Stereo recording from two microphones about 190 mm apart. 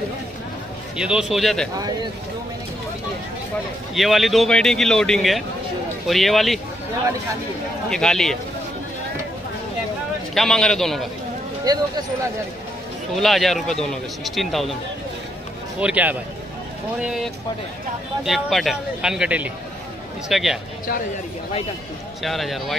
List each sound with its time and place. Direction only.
0.9 s speech: 5° right (ahead or behind)
3.9 s speech: centre (ahead or behind)
7.9 s speech: 5° left (ahead or behind)
10.3 s speech: centre (ahead or behind)
11.7 s speech: 20° right (ahead or behind)
13.1 s speech: centre (ahead or behind)
15.8 s speech: 5° right (ahead or behind)
22.2 s speech: centre (ahead or behind)